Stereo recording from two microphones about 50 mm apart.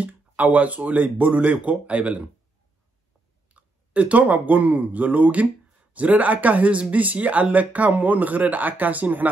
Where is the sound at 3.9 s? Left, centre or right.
Right.